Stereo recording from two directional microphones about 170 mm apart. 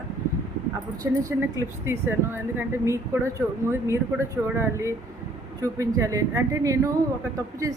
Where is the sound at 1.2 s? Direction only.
15° right (ahead or behind).